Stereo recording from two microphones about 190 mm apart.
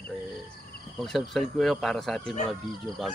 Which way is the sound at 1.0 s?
Centre (ahead or behind).